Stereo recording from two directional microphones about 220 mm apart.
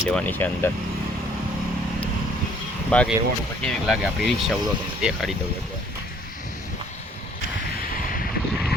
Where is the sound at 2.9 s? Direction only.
5° left (ahead or behind).